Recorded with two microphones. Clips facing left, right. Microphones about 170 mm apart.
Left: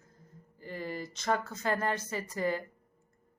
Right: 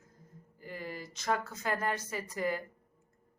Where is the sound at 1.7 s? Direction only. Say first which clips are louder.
Left 2 dB; 30° left (ahead or behind).